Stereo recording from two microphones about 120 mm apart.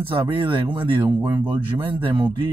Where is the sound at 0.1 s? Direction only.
40° right (ahead or behind).